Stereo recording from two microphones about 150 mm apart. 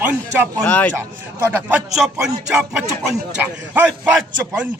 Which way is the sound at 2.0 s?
5° right (ahead or behind).